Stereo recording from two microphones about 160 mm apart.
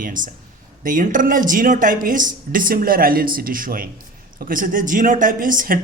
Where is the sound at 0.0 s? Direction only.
55° right (ahead or behind).